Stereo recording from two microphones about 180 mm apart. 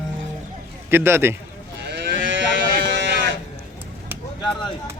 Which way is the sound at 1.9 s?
90° right.